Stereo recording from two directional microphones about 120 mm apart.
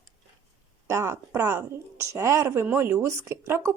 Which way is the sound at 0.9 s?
20° right (ahead or behind).